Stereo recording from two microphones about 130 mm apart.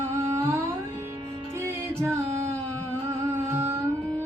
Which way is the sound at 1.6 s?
20° right (ahead or behind).